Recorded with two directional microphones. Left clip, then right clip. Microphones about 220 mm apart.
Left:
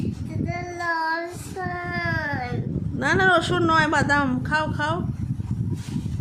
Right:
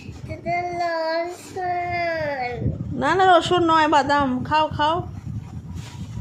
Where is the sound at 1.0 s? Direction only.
90° left.